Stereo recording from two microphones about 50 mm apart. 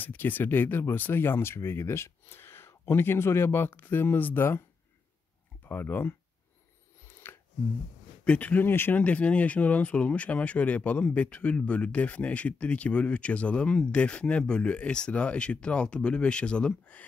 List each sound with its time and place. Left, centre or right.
0.0 s speech: left
5.6 s speech: left
7.2 s a sound: left
8.3 s speech: left
8.6 s speech: left
9.0 s speech: left